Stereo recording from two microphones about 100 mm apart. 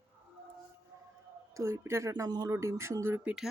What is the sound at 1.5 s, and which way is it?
Speech, 30° right (ahead or behind).